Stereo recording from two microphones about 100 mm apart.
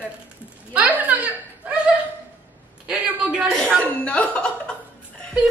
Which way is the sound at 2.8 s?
10° right (ahead or behind).